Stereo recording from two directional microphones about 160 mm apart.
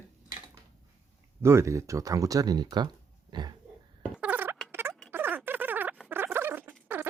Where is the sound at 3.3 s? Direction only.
25° right (ahead or behind).